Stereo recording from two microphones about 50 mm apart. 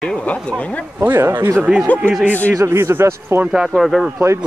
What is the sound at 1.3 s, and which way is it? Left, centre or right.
Speech, right.